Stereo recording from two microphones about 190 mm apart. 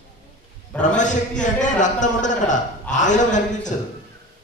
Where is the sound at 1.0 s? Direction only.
40° left (ahead or behind).